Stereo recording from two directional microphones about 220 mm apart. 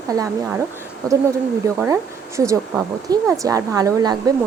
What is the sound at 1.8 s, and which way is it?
A woman's voice, 15° right (ahead or behind).